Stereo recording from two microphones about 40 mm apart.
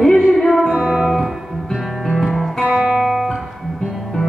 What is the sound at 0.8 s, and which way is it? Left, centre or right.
Music, centre.